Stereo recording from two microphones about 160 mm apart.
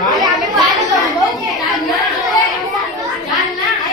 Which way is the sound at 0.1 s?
Centre (ahead or behind).